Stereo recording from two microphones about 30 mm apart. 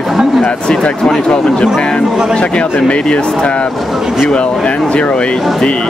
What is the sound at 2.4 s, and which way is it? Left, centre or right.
Speech, left.